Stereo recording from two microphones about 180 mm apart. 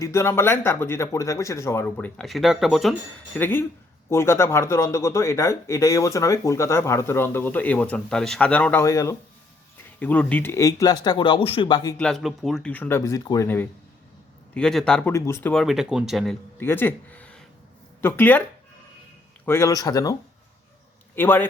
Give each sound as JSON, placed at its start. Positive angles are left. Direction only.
{"t": 0.0, "sound": "speech", "side_deg": 15}
{"t": 3.3, "sound": "speech", "side_deg": 10}
{"t": 11.9, "sound": "speech", "side_deg": 5}
{"t": 14.5, "sound": "speech", "side_deg": 0}
{"t": 15.5, "sound": "speech", "side_deg": 0}
{"t": 16.6, "sound": "speech", "side_deg": 10}
{"t": 19.5, "sound": "speech", "side_deg": 15}
{"t": 21.2, "sound": "speech", "side_deg": 10}